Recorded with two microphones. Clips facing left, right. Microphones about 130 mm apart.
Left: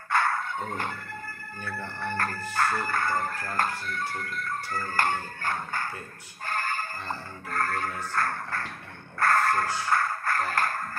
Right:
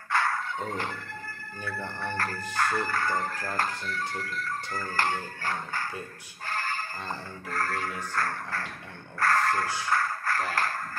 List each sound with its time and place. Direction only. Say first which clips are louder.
0.1 s a sound: left 2 dB; 50° left (ahead or behind)
1.8 s music: left 1 dB; 25° right (ahead or behind)
2.5 s music: left 1 dB; 45° left (ahead or behind)
6.4 s a sound: left 2 dB; 50° left (ahead or behind)
7.4 s music: left 2 dB; 50° left (ahead or behind)
9.2 s speech: left 2 dB; 50° left (ahead or behind)